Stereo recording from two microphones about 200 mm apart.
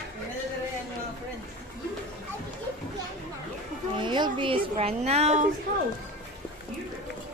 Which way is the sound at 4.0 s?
25° right (ahead or behind).